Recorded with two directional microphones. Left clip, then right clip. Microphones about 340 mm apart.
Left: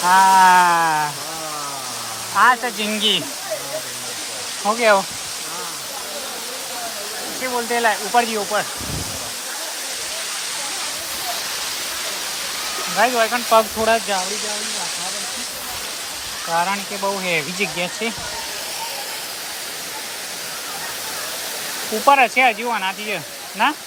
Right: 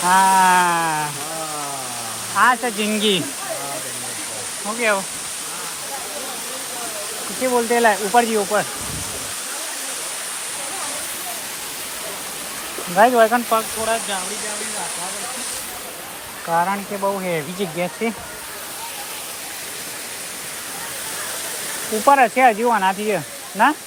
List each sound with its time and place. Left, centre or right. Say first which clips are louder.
0.0 s a sound: left 2 dB; centre
2.3 s speech: left 1 dB; centre
7.7 s speech: right 1 dB; centre
13.0 s speech: right 4 dB; centre
13.8 s speech: left 4 dB; left
16.5 s speech: right 1 dB; centre
22.0 s speech: even; centre